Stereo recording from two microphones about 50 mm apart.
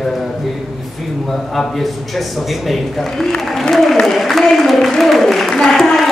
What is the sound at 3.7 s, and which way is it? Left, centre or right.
A man's voice, centre.